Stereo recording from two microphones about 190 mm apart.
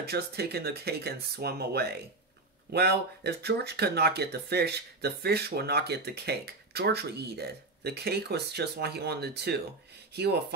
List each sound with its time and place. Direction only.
0.0 s speech: 55° right (ahead or behind)